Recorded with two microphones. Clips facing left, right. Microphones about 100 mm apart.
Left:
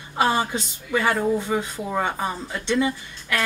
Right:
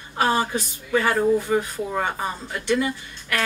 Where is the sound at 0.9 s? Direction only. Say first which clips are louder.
Right 2 dB; 15° left (ahead or behind).